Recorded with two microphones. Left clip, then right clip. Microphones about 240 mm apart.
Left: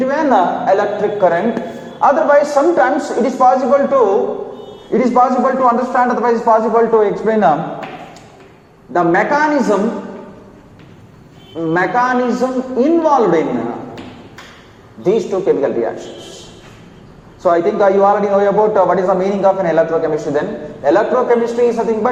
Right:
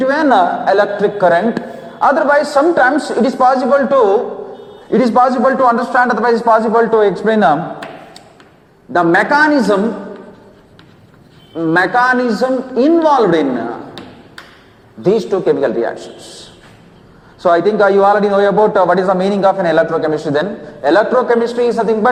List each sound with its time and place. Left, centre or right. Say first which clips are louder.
0.0 s a man's voice: right 2 dB; right
8.9 s a man's voice: right 2 dB; right
11.5 s a man's voice: right 2 dB; right
15.0 s a man's voice: right 1 dB; right
17.4 s a man's voice: right 1 dB; right